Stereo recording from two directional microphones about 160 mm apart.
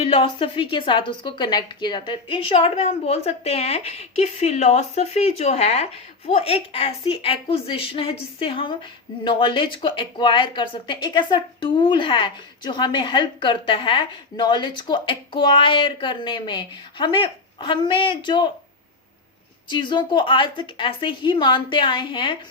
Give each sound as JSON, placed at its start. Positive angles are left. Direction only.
{"t": 0.0, "sound": "speech", "side_deg": 35}
{"t": 19.6, "sound": "speech", "side_deg": 30}